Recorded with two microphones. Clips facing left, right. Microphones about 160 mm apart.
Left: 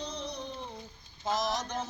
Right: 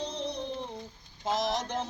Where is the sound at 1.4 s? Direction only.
25° right (ahead or behind).